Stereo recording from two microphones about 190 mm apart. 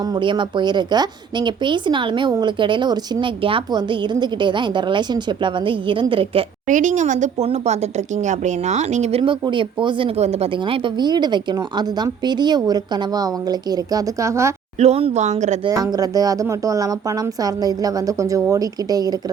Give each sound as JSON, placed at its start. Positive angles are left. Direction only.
{"t": 0.1, "sound": "a woman's voice", "side_deg": -25}
{"t": 6.7, "sound": "a woman's voice", "side_deg": -40}
{"t": 14.8, "sound": "speech", "side_deg": -30}
{"t": 15.6, "sound": "a woman's voice", "side_deg": -20}